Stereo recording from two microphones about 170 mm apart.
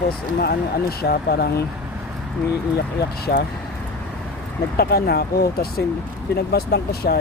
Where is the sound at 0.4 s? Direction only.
70° left (ahead or behind).